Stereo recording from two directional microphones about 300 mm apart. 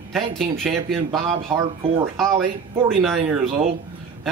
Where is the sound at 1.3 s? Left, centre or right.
Centre.